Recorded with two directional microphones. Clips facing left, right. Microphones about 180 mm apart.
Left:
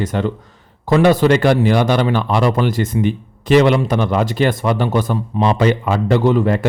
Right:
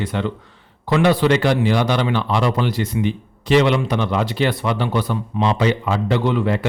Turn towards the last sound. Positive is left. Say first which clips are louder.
# left 4 dB
turn(degrees=45)  # may be behind; listen again after turning